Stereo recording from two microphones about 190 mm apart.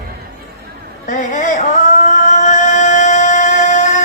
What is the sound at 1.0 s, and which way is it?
Male singing, 40° left (ahead or behind).